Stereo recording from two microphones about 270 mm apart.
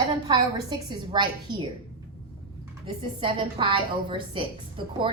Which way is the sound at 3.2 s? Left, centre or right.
Centre.